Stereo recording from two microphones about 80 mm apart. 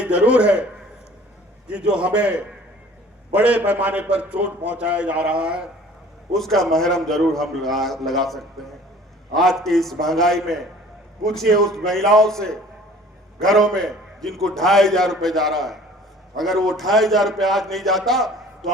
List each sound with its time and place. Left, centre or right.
0.0 s a man's voice: centre
1.7 s a man's voice: centre
3.3 s a man's voice: centre
6.3 s a man's voice: centre